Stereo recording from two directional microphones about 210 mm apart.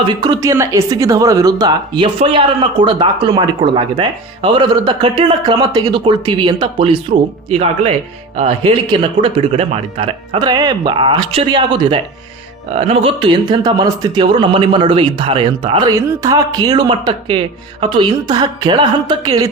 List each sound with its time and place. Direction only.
0.1 s speech: 20° right (ahead or behind)
8.4 s speech: 25° right (ahead or behind)